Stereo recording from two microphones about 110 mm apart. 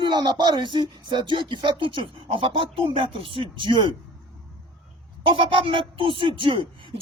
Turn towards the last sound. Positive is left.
turn(degrees=-55)  # may be behind; listen again after turning